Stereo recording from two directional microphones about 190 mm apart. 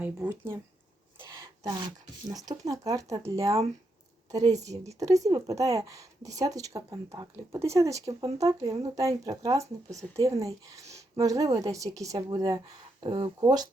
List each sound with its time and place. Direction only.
0.0 s a woman's voice: 10° right (ahead or behind)
1.4 s a sound: 25° right (ahead or behind)
2.3 s a woman's voice: 20° right (ahead or behind)